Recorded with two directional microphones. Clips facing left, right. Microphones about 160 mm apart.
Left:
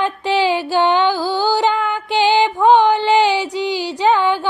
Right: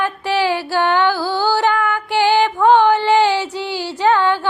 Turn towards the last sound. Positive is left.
turn(degrees=15)  # may be behind; listen again after turning